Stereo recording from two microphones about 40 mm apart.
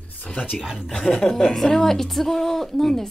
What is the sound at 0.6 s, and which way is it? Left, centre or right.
Speech, centre.